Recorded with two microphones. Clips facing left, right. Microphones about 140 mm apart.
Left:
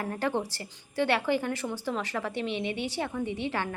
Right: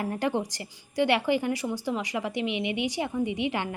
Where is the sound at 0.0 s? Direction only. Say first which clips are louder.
Right 2 dB; 15° right (ahead or behind).